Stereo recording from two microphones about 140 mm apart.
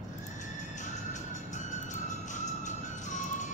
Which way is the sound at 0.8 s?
60° left (ahead or behind).